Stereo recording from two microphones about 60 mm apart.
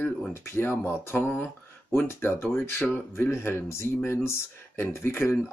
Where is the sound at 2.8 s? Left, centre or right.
Left.